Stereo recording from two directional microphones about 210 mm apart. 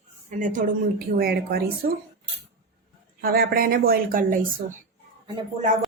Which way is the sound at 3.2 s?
45° right (ahead or behind).